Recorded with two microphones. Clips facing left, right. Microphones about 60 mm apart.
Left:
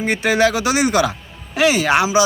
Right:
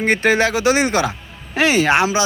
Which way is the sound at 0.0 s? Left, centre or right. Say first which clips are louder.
Right 3 dB; right.